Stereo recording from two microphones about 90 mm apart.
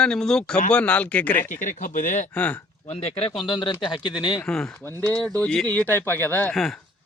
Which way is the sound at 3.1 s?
90° left.